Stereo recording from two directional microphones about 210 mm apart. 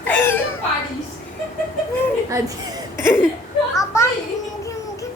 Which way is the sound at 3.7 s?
15° left (ahead or behind).